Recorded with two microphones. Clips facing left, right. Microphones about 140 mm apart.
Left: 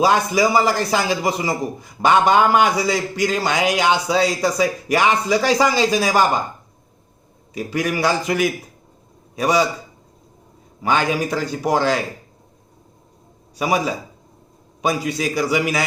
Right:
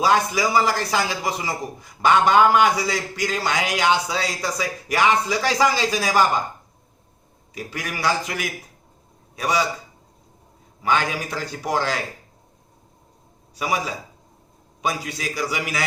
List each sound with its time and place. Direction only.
0.0 s a man's voice: 20° left (ahead or behind)
7.5 s a man's voice: 20° left (ahead or behind)
10.8 s a man's voice: 20° left (ahead or behind)
13.6 s a man's voice: 20° left (ahead or behind)